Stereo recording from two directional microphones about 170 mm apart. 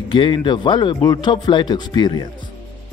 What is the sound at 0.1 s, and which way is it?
A man's voice, 30° left (ahead or behind).